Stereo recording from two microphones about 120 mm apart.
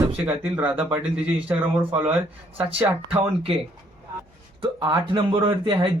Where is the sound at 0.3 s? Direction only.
15° right (ahead or behind).